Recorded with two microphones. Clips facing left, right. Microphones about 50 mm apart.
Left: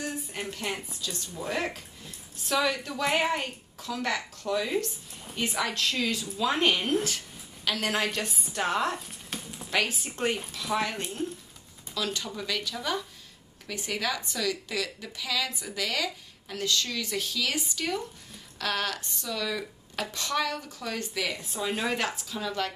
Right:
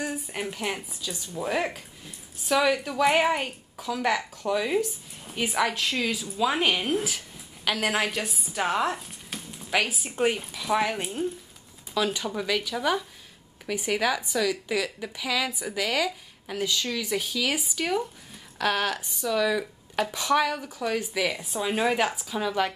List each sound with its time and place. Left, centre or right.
0.0 s a woman's voice: centre